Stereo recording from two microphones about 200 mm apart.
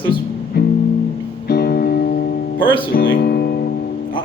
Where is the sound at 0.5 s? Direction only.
55° left (ahead or behind).